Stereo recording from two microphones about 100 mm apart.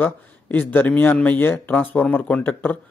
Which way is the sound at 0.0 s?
15° left (ahead or behind).